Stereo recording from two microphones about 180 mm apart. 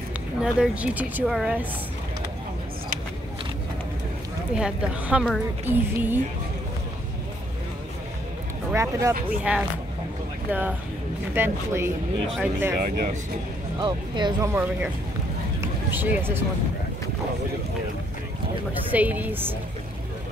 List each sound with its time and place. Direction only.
0.4 s speech: 5° right (ahead or behind)
4.6 s speech: 5° right (ahead or behind)
8.7 s speech: 10° right (ahead or behind)
11.3 s speech: 15° right (ahead or behind)
12.7 s speech: 50° right (ahead or behind)
13.7 s speech: 25° right (ahead or behind)
14.5 s speech: 10° right (ahead or behind)
15.6 s a sound: 10° right (ahead or behind)
18.7 s speech: 10° right (ahead or behind)